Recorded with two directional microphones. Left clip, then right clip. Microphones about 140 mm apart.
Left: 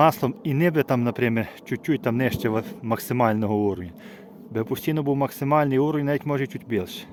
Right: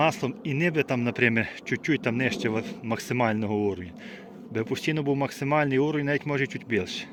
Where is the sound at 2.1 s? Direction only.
35° left (ahead or behind).